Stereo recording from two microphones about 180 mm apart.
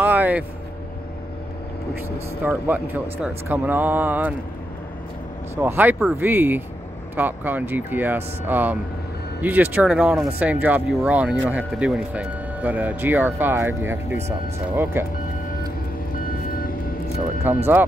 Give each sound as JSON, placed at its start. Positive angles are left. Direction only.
{"t": 0.0, "sound": "vehicle", "side_deg": -10}
{"t": 2.4, "sound": "speech", "side_deg": -10}
{"t": 5.6, "sound": "speech", "side_deg": -10}
{"t": 16.3, "sound": "vehicle", "side_deg": 55}
{"t": 17.5, "sound": "speech", "side_deg": -10}